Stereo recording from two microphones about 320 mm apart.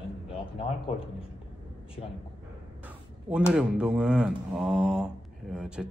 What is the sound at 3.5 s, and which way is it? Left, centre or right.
A man's voice, centre.